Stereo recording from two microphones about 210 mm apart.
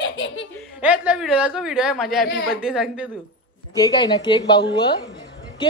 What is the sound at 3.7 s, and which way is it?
A woman's voice, 15° left (ahead or behind).